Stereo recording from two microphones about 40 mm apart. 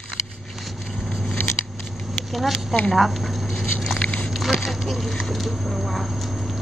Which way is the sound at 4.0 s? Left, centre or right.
Left.